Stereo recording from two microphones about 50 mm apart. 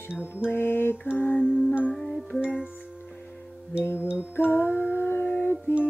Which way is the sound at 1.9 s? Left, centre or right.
Centre.